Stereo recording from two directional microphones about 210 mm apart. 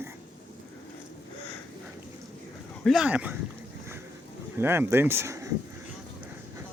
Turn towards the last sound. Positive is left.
turn(degrees=-15)  # may be behind; listen again after turning